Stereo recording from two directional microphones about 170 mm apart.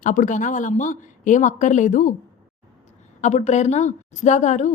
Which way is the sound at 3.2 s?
45° left (ahead or behind).